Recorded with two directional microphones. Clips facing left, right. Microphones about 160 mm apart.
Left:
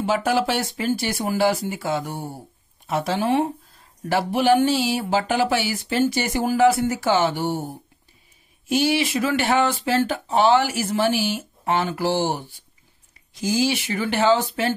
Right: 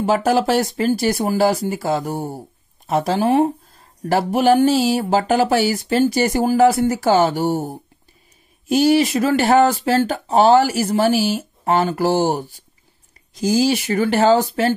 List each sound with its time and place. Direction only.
0.0 s speech: 40° right (ahead or behind)